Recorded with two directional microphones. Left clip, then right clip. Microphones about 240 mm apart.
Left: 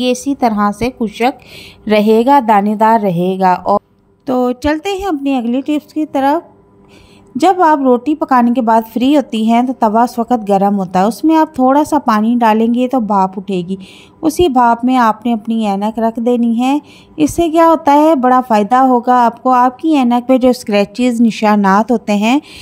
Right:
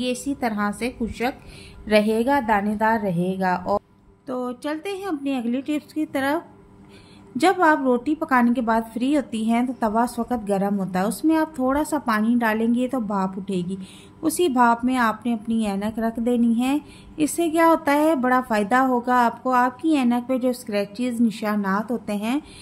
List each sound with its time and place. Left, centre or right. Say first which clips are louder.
0.0 s a woman's voice: left 12 dB; left